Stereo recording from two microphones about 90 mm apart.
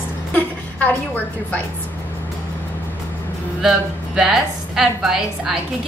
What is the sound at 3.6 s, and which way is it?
A woman's voice, 5° right (ahead or behind).